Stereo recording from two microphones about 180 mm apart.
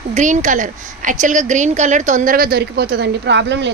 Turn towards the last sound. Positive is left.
turn(degrees=-75)  # may be behind; listen again after turning